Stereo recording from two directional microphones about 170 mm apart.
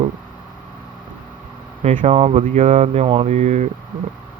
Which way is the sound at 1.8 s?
40° right (ahead or behind).